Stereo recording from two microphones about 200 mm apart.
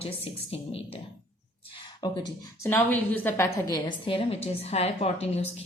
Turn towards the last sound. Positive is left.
turn(degrees=30)  # may be behind; listen again after turning